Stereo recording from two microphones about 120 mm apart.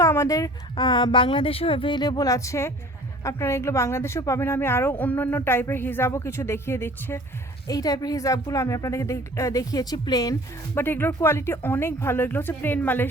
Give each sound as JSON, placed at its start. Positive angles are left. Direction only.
{"t": 0.0, "sound": "a sound", "side_deg": 25}
{"t": 0.8, "sound": "a woman's voice", "side_deg": 40}
{"t": 7.7, "sound": "speech", "side_deg": 30}
{"t": 10.8, "sound": "speech", "side_deg": 20}